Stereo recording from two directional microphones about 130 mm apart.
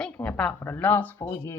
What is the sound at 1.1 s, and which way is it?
Speech, 25° left (ahead or behind).